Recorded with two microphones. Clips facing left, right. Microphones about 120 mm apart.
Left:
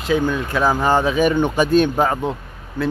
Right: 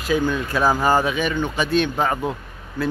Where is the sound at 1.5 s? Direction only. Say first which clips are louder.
Left 5 dB; 45° left (ahead or behind).